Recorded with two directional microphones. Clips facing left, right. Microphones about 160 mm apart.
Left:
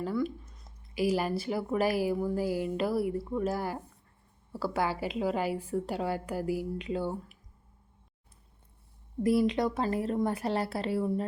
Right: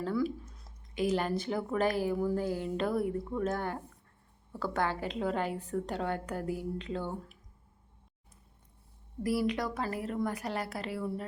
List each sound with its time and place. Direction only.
0.0 s speech: centre (ahead or behind)
9.2 s a woman's voice: 25° left (ahead or behind)